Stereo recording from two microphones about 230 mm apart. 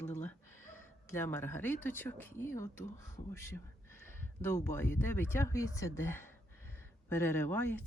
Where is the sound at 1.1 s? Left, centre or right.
Centre.